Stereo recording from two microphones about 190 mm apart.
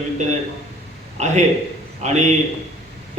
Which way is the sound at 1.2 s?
35° right (ahead or behind).